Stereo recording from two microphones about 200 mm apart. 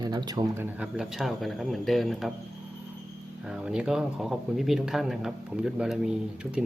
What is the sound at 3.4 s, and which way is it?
Speech, 5° right (ahead or behind).